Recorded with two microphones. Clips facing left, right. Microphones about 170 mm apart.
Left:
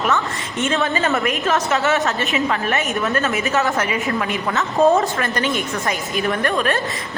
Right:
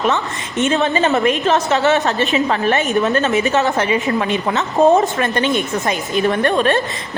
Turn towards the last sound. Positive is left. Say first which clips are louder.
# right 4 dB
turn(degrees=-30)  # may be behind; listen again after turning